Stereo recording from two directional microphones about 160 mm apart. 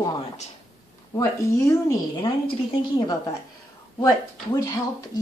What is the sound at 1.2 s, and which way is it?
A woman's voice, 20° left (ahead or behind).